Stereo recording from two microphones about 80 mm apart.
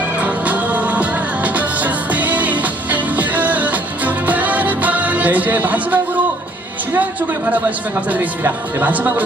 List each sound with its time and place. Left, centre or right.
0.2 s music: centre
6.9 s speech: centre